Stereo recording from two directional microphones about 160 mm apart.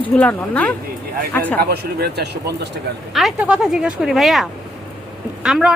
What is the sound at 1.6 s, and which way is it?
Speech, 85° right.